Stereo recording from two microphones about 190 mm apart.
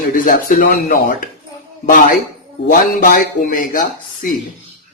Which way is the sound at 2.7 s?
45° left (ahead or behind).